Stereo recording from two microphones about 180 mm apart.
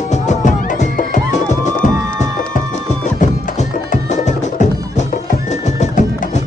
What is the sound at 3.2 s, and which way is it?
Music, 40° left (ahead or behind).